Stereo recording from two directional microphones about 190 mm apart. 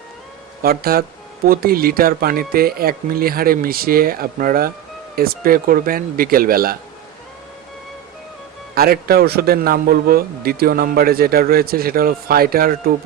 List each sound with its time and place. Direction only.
0.6 s a man's voice: 50° right (ahead or behind)
8.7 s a man's voice: 55° right (ahead or behind)